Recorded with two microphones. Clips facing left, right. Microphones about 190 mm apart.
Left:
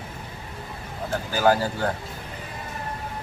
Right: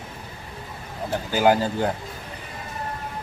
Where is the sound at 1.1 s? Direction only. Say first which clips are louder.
Right 2 dB; 20° right (ahead or behind).